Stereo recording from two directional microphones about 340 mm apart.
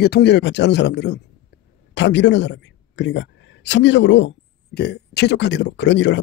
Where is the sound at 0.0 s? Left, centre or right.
Left.